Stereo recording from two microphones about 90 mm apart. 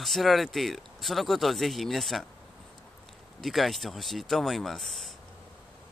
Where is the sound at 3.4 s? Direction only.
Centre (ahead or behind).